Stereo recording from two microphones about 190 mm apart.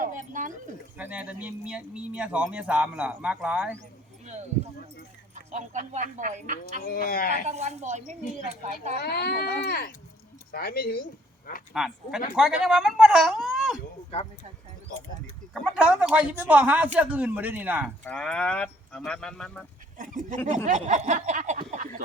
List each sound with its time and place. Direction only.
0.0 s speech: 45° right (ahead or behind)
0.9 s speech: 10° right (ahead or behind)
5.3 s speech: 40° right (ahead or behind)
6.8 s speech: 50° left (ahead or behind)
7.4 s speech: 35° right (ahead or behind)
9.0 s speech: 55° left (ahead or behind)
11.7 s speech: centre (ahead or behind)
15.5 s speech: 5° right (ahead or behind)
18.0 s speech: 5° left (ahead or behind)
20.0 s speech: 40° right (ahead or behind)